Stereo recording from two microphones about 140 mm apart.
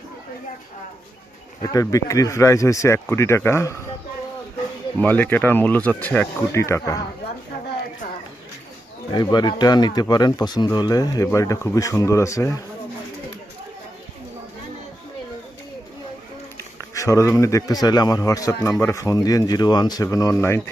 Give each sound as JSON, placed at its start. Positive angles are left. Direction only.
{"t": 1.7, "sound": "speech", "side_deg": 25}
{"t": 4.9, "sound": "speech", "side_deg": 10}
{"t": 9.1, "sound": "speech", "side_deg": 30}
{"t": 16.9, "sound": "speech", "side_deg": 25}